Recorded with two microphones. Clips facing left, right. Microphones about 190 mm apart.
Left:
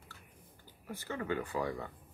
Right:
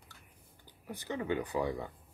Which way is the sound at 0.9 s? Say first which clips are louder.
Right 2 dB; 15° right (ahead or behind).